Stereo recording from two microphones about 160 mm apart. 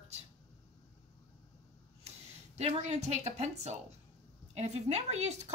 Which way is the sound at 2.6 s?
45° right (ahead or behind).